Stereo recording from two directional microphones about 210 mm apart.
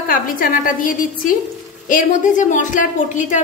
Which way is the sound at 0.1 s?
40° left (ahead or behind).